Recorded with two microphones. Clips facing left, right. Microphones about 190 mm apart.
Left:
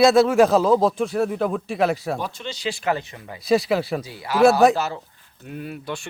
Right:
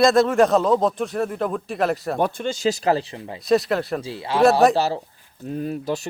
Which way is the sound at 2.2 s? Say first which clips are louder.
Right 7 dB; 50° right (ahead or behind).